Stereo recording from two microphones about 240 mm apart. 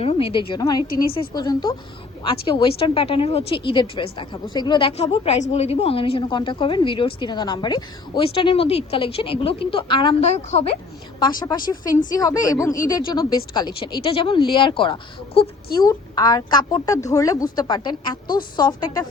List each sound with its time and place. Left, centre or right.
0.0 s a woman's voice: left